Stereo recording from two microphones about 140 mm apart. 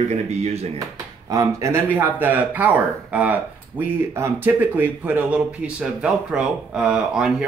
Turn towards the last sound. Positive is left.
turn(degrees=-5)  # may be behind; listen again after turning